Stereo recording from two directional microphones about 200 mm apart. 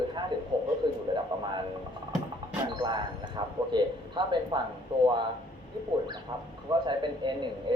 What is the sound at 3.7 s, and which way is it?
Speech, 25° right (ahead or behind).